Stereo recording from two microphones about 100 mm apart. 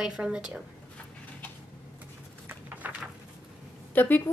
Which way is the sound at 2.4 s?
20° right (ahead or behind).